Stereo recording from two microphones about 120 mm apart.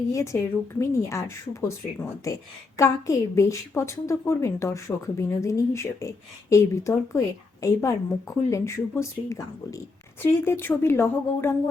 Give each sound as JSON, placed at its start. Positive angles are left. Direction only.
{"t": 0.1, "sound": "a woman's voice", "side_deg": 25}